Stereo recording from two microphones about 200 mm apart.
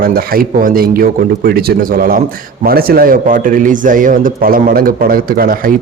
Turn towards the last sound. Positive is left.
turn(degrees=-45)  # may be behind; listen again after turning